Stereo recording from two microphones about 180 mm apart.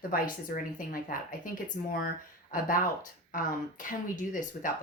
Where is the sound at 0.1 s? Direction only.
50° left (ahead or behind).